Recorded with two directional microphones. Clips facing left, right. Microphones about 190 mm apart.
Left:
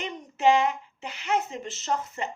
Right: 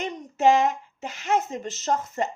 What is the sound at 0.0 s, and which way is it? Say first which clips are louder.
A woman's voice: right 2 dB; 45° right (ahead or behind).